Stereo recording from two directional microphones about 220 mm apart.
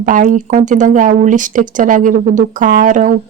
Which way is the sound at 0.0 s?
35° right (ahead or behind).